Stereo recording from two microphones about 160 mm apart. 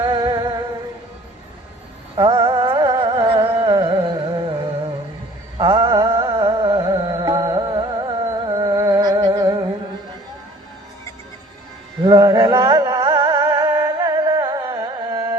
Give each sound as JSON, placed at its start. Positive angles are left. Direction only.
{"t": 0.0, "sound": "music", "side_deg": -25}
{"t": 2.1, "sound": "music", "side_deg": -30}
{"t": 5.5, "sound": "music", "side_deg": -30}
{"t": 12.0, "sound": "music", "side_deg": -25}